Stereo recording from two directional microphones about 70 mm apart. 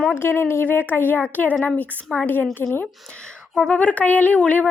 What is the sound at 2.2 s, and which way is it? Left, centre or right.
Speech, left.